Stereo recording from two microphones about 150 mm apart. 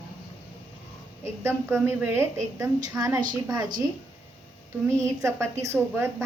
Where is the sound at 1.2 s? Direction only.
15° right (ahead or behind).